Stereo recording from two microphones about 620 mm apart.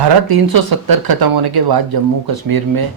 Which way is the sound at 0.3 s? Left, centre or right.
Right.